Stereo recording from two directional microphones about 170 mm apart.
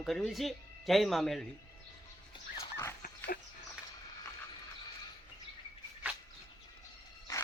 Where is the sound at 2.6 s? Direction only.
15° left (ahead or behind).